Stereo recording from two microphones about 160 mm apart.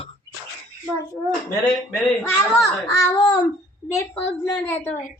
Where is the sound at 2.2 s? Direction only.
15° left (ahead or behind).